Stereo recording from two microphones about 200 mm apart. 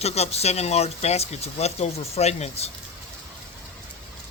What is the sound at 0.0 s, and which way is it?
Speech, 30° left (ahead or behind).